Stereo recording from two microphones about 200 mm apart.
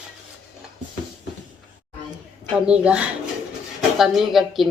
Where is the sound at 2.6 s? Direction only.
5° right (ahead or behind).